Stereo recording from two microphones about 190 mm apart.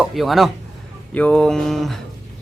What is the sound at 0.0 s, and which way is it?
A man's voice, centre (ahead or behind).